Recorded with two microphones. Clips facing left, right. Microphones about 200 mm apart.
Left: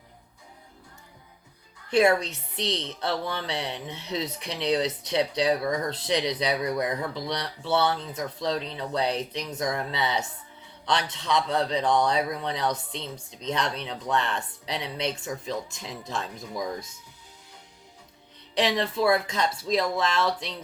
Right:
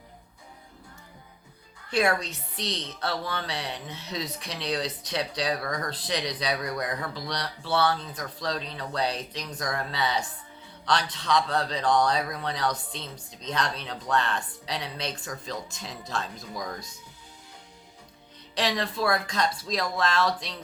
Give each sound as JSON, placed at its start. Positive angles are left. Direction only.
{"t": 1.9, "sound": "a woman's voice", "side_deg": 25}
{"t": 18.5, "sound": "speech", "side_deg": 20}